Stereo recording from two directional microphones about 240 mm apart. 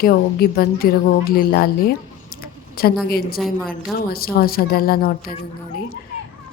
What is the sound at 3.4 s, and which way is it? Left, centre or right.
Speech, centre.